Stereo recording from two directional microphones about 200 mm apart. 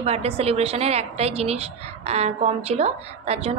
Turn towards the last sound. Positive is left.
turn(degrees=-30)  # may be behind; listen again after turning